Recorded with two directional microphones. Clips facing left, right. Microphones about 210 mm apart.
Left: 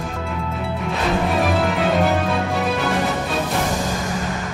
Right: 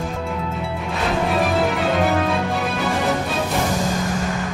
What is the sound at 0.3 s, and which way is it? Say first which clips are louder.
Music: right 1 dB; centre (ahead or behind).